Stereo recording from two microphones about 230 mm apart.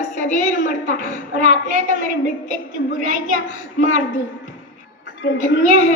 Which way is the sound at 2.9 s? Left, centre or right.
Left.